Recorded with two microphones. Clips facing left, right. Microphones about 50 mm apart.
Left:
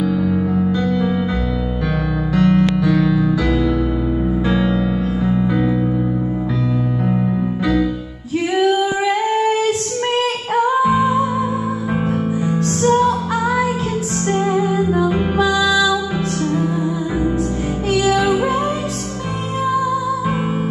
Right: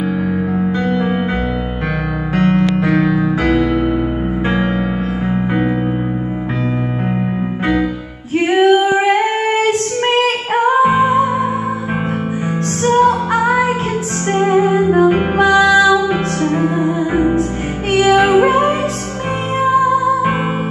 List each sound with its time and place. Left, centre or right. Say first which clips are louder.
0.3 s music: even; right
2.3 s music: right 1 dB; right
8.5 s female singing: right 5 dB; right
12.8 s music: right 4 dB; right